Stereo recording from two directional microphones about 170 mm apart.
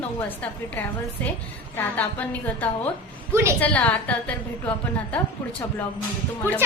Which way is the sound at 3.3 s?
15° right (ahead or behind).